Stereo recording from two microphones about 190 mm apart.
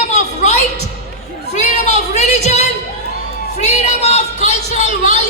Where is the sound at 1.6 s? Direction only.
35° left (ahead or behind).